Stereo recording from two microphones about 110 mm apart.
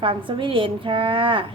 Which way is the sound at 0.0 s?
50° right (ahead or behind).